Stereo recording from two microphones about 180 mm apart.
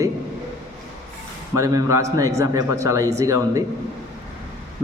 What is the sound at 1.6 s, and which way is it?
A man's voice, 20° right (ahead or behind).